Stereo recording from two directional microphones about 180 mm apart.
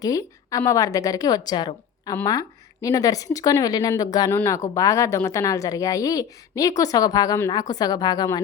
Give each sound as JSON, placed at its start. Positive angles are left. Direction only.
{"t": 0.0, "sound": "a woman's voice", "side_deg": 20}